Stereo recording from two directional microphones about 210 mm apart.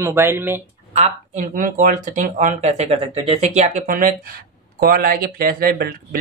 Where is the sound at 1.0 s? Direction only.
35° right (ahead or behind).